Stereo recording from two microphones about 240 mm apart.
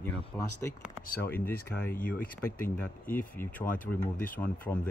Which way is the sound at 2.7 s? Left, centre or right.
Centre.